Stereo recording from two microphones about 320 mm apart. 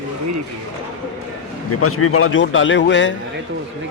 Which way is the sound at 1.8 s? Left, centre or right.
Left.